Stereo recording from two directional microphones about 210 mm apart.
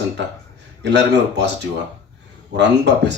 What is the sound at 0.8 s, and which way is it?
Speech, 55° right (ahead or behind).